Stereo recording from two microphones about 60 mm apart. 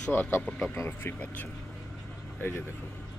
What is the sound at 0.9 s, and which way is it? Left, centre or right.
Speech, left.